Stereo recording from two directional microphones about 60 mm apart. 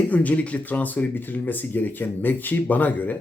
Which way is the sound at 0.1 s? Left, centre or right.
Left.